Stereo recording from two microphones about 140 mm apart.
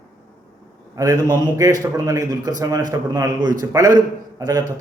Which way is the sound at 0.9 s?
25° right (ahead or behind).